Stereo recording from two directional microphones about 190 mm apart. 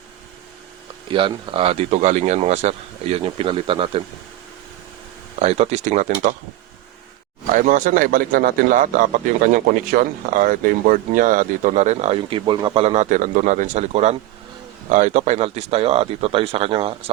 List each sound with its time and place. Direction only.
1.1 s speech: 25° right (ahead or behind)
5.4 s speech: 35° right (ahead or behind)
7.5 s a man's voice: 40° right (ahead or behind)